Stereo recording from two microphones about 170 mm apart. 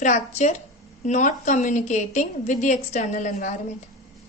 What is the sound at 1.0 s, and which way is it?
A woman's voice, 45° left (ahead or behind).